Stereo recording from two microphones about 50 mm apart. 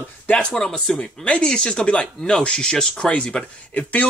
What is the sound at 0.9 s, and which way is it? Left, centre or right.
Speech, left.